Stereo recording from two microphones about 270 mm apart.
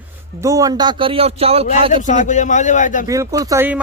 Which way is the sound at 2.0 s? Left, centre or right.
Left.